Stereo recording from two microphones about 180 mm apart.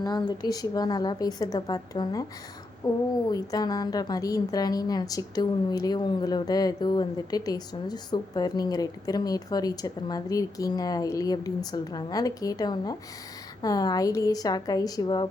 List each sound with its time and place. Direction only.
0.0 s a woman's voice: 25° left (ahead or behind)